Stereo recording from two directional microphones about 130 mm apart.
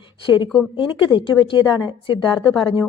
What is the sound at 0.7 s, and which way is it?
Speech, 40° left (ahead or behind).